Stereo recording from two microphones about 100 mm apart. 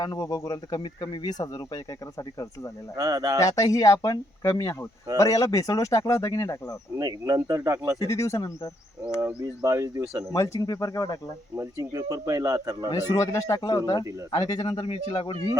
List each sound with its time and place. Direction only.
0.0 s speech: 40° left (ahead or behind)
2.9 s speech: 35° right (ahead or behind)
3.4 s speech: 35° left (ahead or behind)
6.9 s speech: 35° right (ahead or behind)
8.0 s speech: 30° left (ahead or behind)
9.6 s speech: 30° right (ahead or behind)
10.3 s speech: 35° left (ahead or behind)
11.5 s speech: 30° right (ahead or behind)
12.9 s a man's voice: 35° left (ahead or behind); by 15.3 s 65° left (ahead or behind)